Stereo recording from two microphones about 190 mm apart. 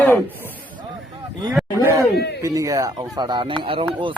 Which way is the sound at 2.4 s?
15° right (ahead or behind).